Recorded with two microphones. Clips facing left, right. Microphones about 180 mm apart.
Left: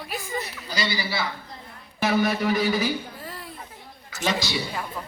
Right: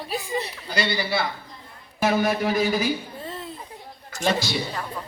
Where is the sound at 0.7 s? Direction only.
55° right (ahead or behind).